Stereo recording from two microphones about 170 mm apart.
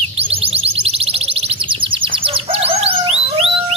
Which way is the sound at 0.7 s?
35° right (ahead or behind).